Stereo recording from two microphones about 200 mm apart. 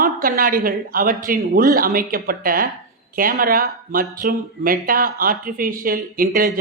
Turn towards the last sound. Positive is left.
turn(degrees=-45)  # may be behind; listen again after turning